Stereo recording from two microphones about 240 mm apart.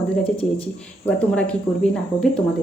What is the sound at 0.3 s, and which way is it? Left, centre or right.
Speech, centre.